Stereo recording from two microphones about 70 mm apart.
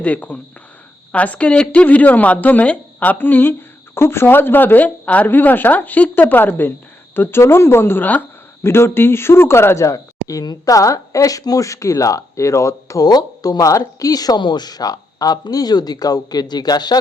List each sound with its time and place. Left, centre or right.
0.0 s speech: left
13.0 s speech: left